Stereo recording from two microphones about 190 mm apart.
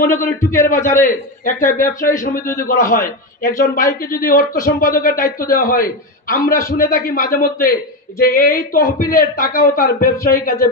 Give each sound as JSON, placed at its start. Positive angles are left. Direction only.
{"t": 0.0, "sound": "a man's voice", "side_deg": 45}